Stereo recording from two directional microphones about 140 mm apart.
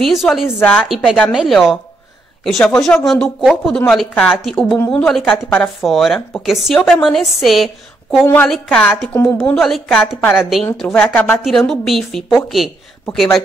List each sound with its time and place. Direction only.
0.0 s speech: centre (ahead or behind)
0.6 s a woman's voice: 10° left (ahead or behind)
0.8 s speech: centre (ahead or behind)
4.7 s a woman's voice: 15° left (ahead or behind)
5.0 s speech: 5° left (ahead or behind)
8.3 s a woman's voice: 10° left (ahead or behind)